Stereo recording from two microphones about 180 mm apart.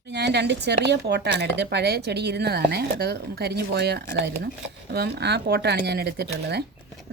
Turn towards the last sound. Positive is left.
turn(degrees=-65)  # may be behind; listen again after turning